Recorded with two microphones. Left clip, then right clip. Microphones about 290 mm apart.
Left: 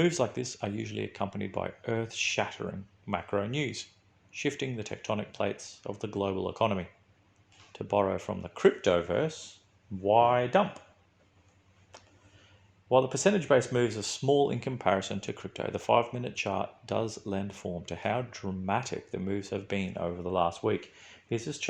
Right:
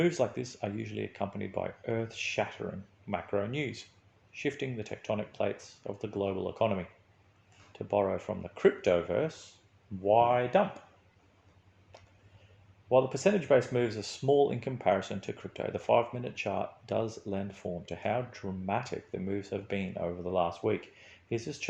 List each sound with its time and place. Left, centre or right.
0.0 s speech: left
12.9 s speech: left